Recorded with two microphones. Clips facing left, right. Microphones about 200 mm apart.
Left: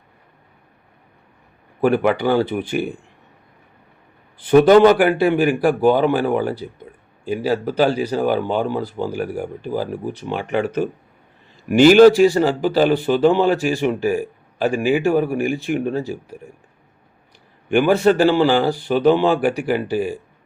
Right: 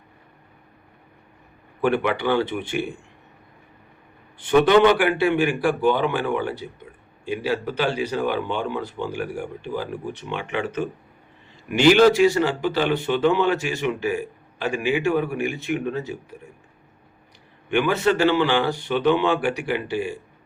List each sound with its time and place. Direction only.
1.8 s speech: 40° left (ahead or behind)
4.4 s speech: 40° left (ahead or behind)
18.0 s a man's voice: 50° left (ahead or behind)
18.3 s speech: 35° left (ahead or behind)